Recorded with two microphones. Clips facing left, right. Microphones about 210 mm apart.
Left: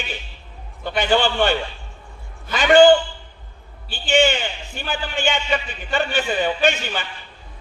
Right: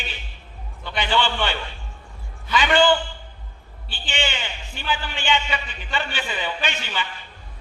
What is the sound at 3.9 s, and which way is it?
A man's voice, 45° left (ahead or behind).